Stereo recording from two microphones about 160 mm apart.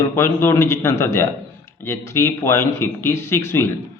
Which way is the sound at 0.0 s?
15° left (ahead or behind).